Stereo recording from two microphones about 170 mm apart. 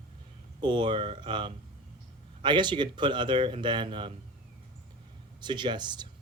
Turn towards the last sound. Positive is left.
turn(degrees=-25)  # may be behind; listen again after turning